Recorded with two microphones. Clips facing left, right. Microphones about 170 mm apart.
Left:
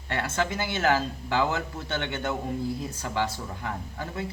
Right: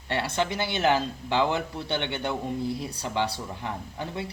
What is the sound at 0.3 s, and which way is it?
Speech, 20° right (ahead or behind).